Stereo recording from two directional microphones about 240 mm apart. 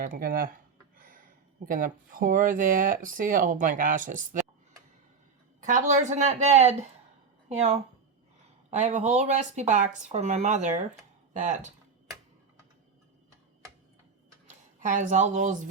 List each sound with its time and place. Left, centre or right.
0.0 s speech: right
1.6 s speech: right
5.6 s speech: right
8.8 s speech: right
14.8 s speech: right